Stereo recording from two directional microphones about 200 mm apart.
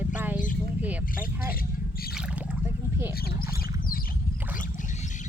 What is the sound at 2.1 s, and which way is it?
Boat, 5° right (ahead or behind).